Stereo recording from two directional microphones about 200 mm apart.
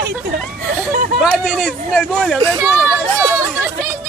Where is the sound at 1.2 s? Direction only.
5° right (ahead or behind).